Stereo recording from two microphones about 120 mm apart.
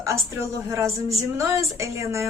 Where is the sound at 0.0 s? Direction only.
25° right (ahead or behind).